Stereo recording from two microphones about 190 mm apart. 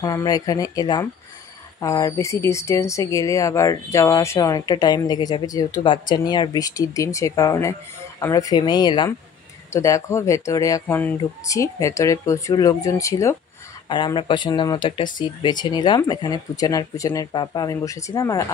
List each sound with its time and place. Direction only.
0.0 s speech: 20° left (ahead or behind)